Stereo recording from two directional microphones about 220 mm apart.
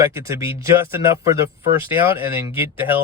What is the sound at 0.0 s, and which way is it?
Speech, 15° right (ahead or behind).